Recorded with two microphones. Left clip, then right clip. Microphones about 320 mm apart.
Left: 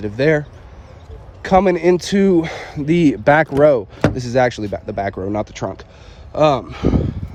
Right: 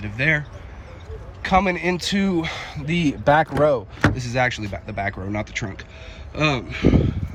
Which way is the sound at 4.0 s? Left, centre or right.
Centre.